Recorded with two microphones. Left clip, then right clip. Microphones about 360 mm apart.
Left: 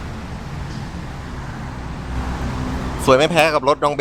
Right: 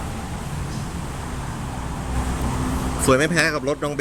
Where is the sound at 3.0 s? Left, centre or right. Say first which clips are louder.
Left 5 dB; centre.